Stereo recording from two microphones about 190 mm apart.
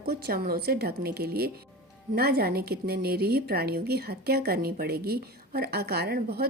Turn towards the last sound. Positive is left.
turn(degrees=-55)  # may be behind; listen again after turning